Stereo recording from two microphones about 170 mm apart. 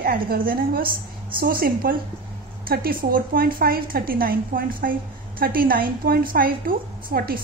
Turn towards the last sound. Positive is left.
turn(degrees=-60)  # may be behind; listen again after turning